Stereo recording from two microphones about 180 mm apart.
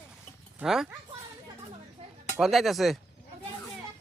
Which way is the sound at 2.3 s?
Centre (ahead or behind).